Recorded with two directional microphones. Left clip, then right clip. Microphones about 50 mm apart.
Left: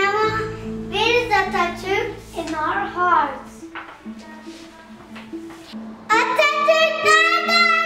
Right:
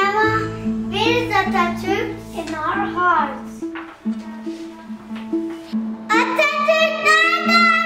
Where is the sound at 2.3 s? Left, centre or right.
Centre.